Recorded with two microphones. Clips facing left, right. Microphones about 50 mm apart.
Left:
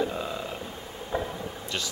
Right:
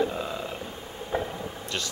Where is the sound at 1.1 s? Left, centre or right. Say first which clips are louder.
Right 1 dB; right.